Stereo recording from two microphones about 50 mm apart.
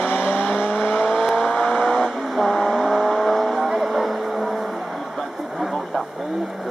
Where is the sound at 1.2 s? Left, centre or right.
Centre.